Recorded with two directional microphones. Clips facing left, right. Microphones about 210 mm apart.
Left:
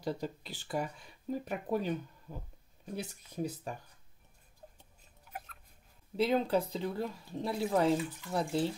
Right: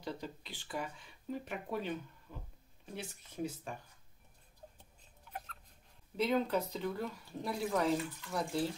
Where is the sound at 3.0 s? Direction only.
40° left (ahead or behind).